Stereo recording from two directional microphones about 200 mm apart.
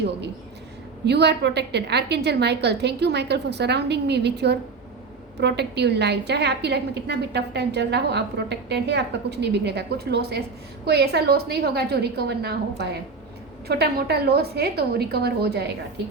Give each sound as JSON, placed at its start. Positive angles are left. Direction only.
{"t": 1.0, "sound": "a woman's voice", "side_deg": -55}